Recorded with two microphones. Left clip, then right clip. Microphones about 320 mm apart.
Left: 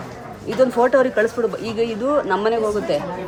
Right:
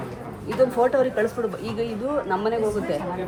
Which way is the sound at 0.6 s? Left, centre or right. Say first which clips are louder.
Left 4 dB; left.